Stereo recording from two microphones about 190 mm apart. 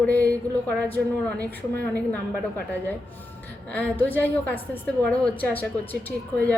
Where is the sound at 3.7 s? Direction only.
10° left (ahead or behind).